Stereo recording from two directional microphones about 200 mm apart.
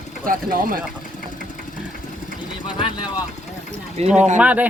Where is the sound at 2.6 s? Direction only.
20° left (ahead or behind).